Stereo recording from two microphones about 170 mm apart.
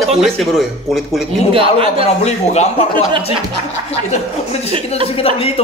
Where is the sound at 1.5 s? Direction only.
35° right (ahead or behind).